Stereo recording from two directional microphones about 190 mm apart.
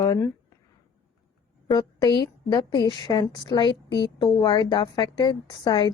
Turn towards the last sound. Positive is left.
turn(degrees=20)  # may be behind; listen again after turning